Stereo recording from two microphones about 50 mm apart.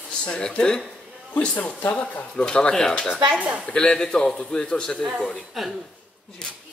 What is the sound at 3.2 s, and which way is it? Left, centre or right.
Speech, right.